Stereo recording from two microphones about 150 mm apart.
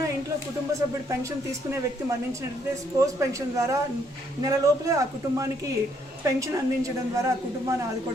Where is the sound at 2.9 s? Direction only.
20° right (ahead or behind).